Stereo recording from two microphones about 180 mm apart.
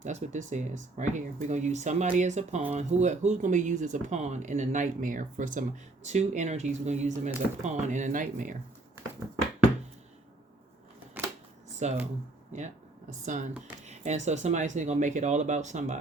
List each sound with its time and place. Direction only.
0.0 s speech: 40° right (ahead or behind)
11.2 s camera: 10° right (ahead or behind)
11.8 s speech: 40° right (ahead or behind)